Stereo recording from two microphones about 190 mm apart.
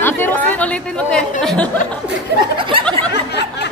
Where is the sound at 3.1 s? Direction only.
60° left (ahead or behind).